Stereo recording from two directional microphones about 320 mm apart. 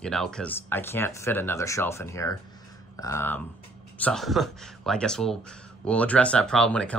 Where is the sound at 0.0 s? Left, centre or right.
Centre.